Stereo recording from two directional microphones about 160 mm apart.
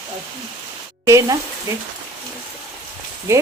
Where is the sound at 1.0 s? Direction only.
20° right (ahead or behind).